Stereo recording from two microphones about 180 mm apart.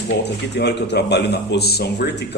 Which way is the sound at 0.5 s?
70° left (ahead or behind).